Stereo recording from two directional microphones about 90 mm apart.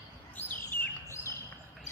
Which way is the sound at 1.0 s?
30° left (ahead or behind).